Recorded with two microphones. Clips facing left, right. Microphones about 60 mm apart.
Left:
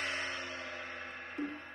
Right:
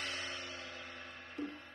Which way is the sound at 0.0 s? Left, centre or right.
Left.